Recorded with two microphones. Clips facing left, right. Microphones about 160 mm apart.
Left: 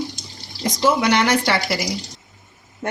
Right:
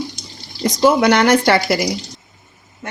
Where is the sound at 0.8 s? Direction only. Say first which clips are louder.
Right 5 dB; 50° right (ahead or behind).